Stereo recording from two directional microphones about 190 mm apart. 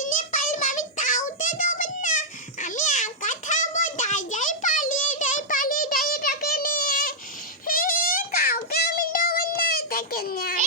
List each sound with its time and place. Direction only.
0.0 s child singing: 45° left (ahead or behind)